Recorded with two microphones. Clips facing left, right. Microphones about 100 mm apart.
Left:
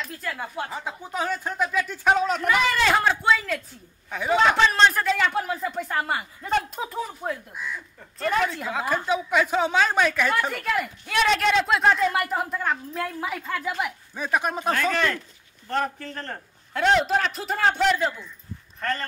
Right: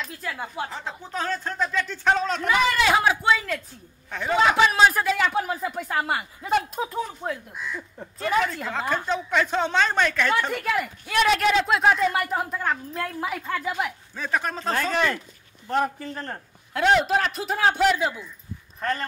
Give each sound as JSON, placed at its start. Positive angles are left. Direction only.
{"t": 0.0, "sound": "speech", "side_deg": -5}
{"t": 0.7, "sound": "speech", "side_deg": 10}
{"t": 2.4, "sound": "speech", "side_deg": 0}
{"t": 14.1, "sound": "speech", "side_deg": 15}
{"t": 14.7, "sound": "speech", "side_deg": -15}